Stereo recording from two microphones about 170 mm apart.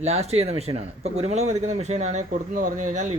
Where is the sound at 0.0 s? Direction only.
40° right (ahead or behind).